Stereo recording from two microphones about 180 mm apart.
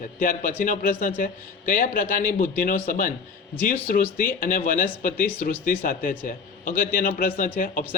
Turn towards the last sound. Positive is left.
turn(degrees=50)  # may be behind; listen again after turning